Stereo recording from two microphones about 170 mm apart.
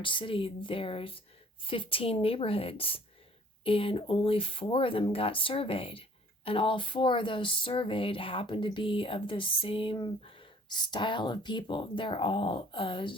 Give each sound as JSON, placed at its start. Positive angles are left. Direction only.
{"t": 0.0, "sound": "speech", "side_deg": 30}